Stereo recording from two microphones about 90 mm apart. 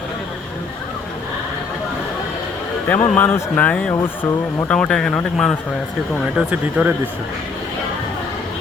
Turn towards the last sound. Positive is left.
turn(degrees=-20)  # may be behind; listen again after turning